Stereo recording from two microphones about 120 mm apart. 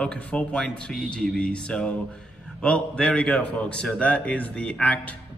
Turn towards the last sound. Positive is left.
turn(degrees=10)  # may be behind; listen again after turning